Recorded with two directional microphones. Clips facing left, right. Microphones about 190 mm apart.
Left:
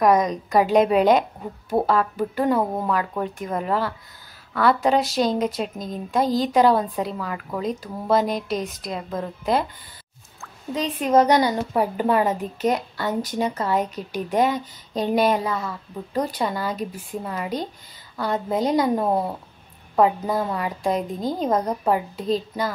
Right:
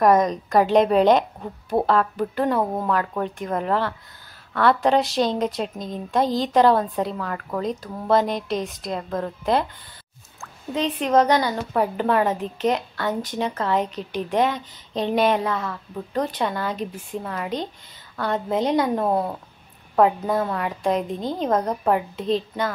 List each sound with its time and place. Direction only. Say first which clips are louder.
0.0 s a woman's voice: right 1 dB; centre (ahead or behind)
10.7 s a woman's voice: even; 5° left (ahead or behind)